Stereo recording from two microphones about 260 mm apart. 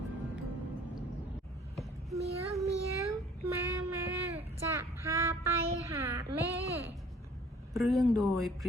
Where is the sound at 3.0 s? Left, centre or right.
Centre.